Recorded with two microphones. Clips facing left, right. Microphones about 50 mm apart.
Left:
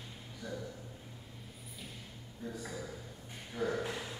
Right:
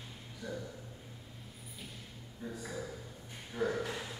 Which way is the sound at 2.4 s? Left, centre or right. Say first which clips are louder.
Even; centre.